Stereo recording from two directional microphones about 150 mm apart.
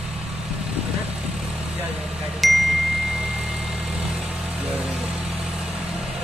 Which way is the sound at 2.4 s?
Centre (ahead or behind).